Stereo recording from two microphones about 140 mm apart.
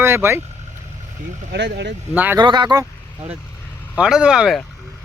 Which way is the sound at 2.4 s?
35° right (ahead or behind).